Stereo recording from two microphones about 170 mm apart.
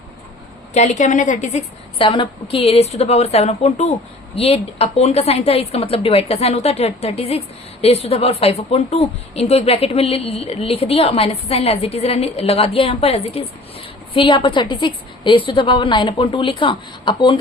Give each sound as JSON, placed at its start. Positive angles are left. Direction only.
{"t": 0.7, "sound": "a woman's voice", "side_deg": 45}
{"t": 2.0, "sound": "a woman's voice", "side_deg": 30}